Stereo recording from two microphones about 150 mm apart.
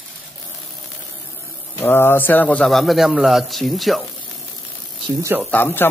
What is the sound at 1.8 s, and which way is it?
Speech, 15° left (ahead or behind).